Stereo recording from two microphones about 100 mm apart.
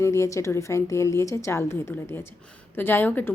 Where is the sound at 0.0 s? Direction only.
30° left (ahead or behind).